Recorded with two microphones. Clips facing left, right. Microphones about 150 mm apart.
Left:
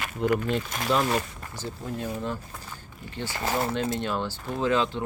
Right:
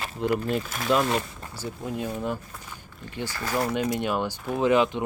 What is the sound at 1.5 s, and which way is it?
Speech, 10° right (ahead or behind).